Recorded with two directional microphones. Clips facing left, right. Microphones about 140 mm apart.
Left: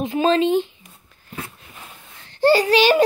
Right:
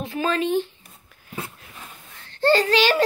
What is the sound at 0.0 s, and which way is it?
Speech, 20° left (ahead or behind).